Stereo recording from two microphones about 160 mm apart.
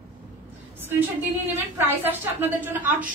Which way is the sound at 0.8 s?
15° right (ahead or behind).